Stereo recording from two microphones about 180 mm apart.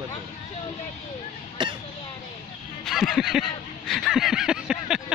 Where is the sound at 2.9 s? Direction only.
Centre (ahead or behind).